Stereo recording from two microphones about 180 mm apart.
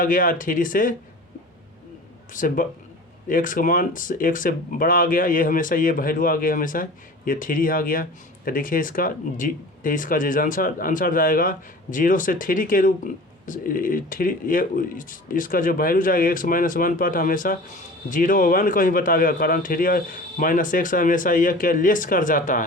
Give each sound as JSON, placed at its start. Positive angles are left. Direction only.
{"t": 0.0, "sound": "speech", "side_deg": 50}
{"t": 2.3, "sound": "speech", "side_deg": 45}